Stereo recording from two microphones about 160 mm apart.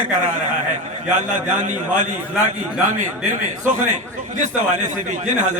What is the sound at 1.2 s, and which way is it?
Speech, 50° right (ahead or behind).